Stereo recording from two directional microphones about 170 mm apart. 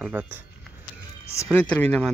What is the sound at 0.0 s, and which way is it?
Speech, 10° right (ahead or behind).